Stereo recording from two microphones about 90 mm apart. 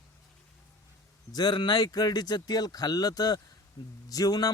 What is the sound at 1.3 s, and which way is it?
A man's voice, 55° left (ahead or behind).